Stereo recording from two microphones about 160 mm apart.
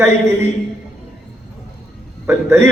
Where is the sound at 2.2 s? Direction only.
15° right (ahead or behind).